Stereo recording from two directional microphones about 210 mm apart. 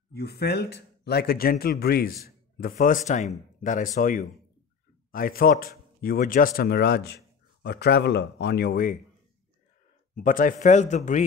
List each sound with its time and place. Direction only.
0.1 s speech: 50° left (ahead or behind)
10.2 s speech: 40° left (ahead or behind)